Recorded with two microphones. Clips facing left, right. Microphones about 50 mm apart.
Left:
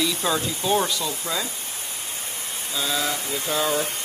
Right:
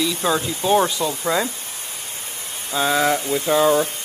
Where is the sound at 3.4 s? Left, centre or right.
Right.